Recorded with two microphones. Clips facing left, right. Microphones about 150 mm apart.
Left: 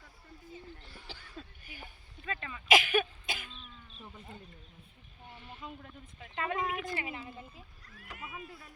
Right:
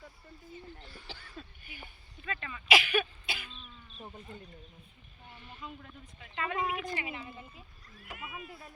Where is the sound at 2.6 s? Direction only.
45° left (ahead or behind).